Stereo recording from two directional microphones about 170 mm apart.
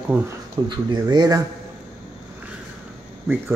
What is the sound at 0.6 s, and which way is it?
Speech, 25° right (ahead or behind).